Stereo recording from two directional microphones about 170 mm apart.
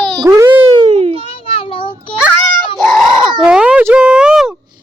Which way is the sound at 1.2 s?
35° left (ahead or behind).